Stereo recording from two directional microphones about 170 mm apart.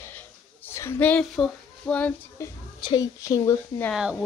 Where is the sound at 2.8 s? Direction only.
20° left (ahead or behind).